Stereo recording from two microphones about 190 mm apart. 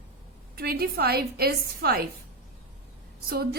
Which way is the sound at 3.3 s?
55° right (ahead or behind).